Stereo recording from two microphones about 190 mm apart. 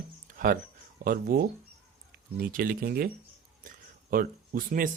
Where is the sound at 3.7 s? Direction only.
45° right (ahead or behind).